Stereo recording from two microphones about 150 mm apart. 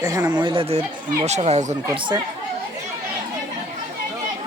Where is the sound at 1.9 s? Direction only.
30° right (ahead or behind).